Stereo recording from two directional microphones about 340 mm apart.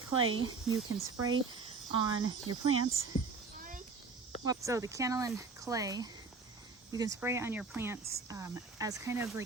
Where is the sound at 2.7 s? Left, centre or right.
Right.